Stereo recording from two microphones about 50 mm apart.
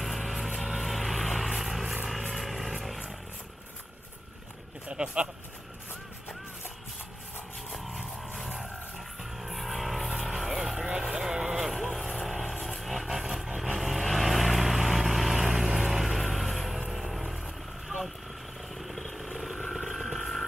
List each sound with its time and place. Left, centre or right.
0.0 s vehicle: centre
4.8 s speech: centre
7.7 s vehicle: centre
9.2 s vehicle: centre
10.4 s vehicle: centre
13.0 s a sound: centre
13.6 s vehicle: centre
19.7 s a sound: centre